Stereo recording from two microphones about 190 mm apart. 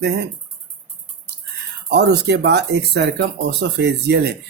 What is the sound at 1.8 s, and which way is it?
Speech, 60° right (ahead or behind).